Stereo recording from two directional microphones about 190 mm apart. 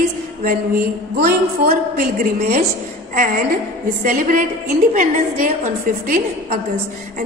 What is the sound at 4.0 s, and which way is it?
A woman's voice, 45° right (ahead or behind).